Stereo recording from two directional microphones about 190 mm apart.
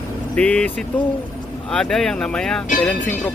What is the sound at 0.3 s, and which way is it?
Speech, 5° left (ahead or behind).